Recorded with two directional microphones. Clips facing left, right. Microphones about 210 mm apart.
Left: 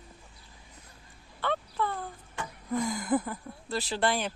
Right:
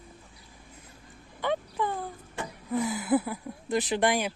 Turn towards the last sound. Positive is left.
turn(degrees=-15)  # may be behind; listen again after turning